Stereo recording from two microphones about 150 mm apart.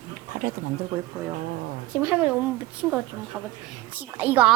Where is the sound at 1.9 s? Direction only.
10° right (ahead or behind).